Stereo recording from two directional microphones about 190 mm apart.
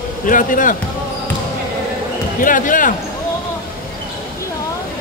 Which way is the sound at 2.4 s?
45° left (ahead or behind).